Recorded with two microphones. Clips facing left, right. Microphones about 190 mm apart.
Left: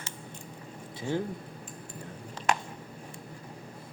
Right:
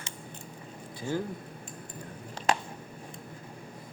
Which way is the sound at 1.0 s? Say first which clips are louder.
Left 1 dB; 25° left (ahead or behind).